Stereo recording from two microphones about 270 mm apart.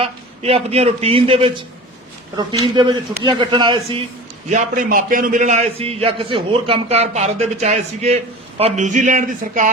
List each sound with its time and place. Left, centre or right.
0.0 s a man's voice: right
2.7 s a man's voice: centre